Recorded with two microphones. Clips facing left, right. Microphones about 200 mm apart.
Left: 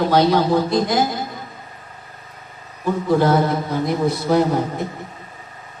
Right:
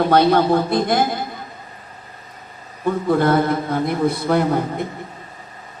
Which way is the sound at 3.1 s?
55° right (ahead or behind).